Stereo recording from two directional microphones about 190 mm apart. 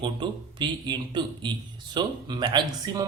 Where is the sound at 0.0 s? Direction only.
25° right (ahead or behind).